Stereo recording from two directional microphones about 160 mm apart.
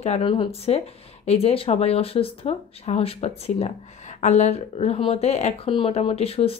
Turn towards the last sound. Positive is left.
turn(degrees=35)  # may be behind; listen again after turning